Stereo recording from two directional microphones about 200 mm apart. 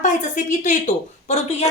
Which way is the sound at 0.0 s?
40° left (ahead or behind).